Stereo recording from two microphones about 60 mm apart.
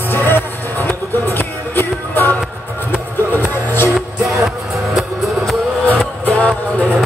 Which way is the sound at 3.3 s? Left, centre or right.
Left.